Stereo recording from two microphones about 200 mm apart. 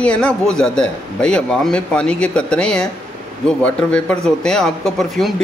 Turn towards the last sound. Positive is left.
turn(degrees=0)  # may be behind; listen again after turning